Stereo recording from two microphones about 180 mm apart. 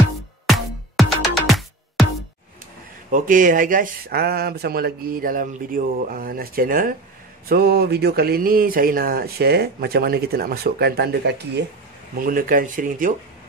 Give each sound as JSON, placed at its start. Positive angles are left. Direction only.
{"t": 1.0, "sound": "music", "side_deg": 0}
{"t": 3.1, "sound": "speech", "side_deg": -45}
{"t": 12.2, "sound": "speech", "side_deg": -50}